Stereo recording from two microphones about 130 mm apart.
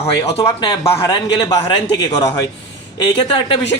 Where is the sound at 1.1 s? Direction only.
35° left (ahead or behind).